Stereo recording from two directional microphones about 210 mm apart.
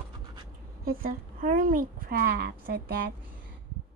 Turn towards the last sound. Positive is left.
turn(degrees=-50)  # may be behind; listen again after turning